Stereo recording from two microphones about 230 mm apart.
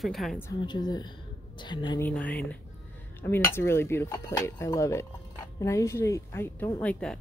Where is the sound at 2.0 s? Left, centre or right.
Centre.